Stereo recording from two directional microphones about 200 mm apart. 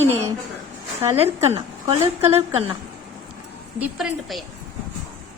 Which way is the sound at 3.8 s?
Centre (ahead or behind).